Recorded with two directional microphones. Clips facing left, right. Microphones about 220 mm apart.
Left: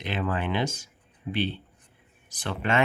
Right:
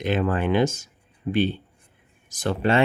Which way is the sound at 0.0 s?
45° right (ahead or behind).